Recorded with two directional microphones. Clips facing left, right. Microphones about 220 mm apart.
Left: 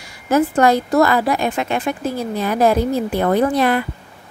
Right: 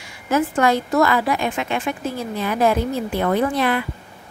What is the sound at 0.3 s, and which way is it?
A woman's voice, 40° left (ahead or behind).